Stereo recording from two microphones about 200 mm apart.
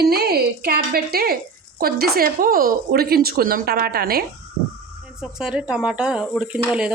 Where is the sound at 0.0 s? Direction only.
50° right (ahead or behind).